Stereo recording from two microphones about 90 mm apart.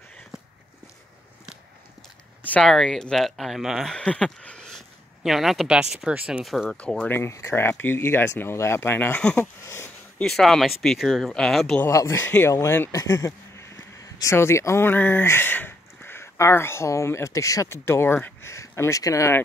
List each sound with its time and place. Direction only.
2.4 s a sound: 15° left (ahead or behind)
2.7 s speech: 5° left (ahead or behind)
3.9 s speech: 10° left (ahead or behind); by 6.4 s 15° right (ahead or behind)
6.4 s speech: centre (ahead or behind)
7.1 s speech: 30° left (ahead or behind)
9.4 s a sound: 30° left (ahead or behind)
10.2 s speech: 5° left (ahead or behind)
11.9 s speech: 35° left (ahead or behind)